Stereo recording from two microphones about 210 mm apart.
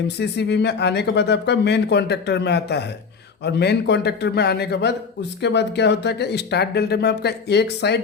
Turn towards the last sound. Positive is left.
turn(degrees=55)  # may be behind; listen again after turning